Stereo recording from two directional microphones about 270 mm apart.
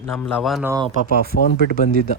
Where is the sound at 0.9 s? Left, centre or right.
Left.